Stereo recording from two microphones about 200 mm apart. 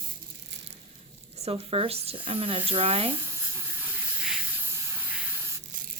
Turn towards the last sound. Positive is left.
turn(degrees=-10)  # may be behind; listen again after turning